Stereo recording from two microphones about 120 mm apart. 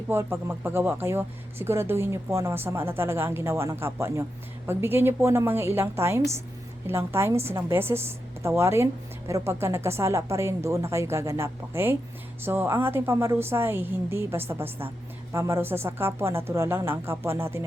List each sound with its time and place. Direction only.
0.1 s speech: 20° right (ahead or behind)